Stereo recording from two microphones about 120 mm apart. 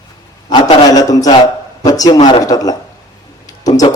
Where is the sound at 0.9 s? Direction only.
30° left (ahead or behind).